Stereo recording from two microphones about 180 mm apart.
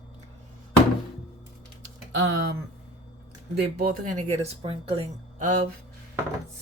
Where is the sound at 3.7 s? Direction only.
55° right (ahead or behind).